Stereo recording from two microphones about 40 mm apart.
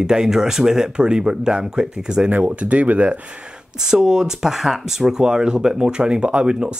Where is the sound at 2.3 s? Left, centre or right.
Right.